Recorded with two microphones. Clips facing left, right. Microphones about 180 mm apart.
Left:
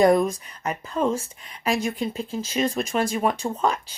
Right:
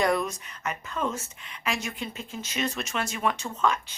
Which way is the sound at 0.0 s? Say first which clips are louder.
Left 8 dB; 35° left (ahead or behind).